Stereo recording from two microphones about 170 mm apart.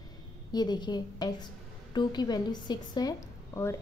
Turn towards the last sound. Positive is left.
turn(degrees=15)  # may be behind; listen again after turning